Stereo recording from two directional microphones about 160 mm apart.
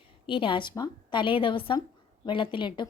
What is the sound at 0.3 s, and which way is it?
A woman's voice, 30° left (ahead or behind).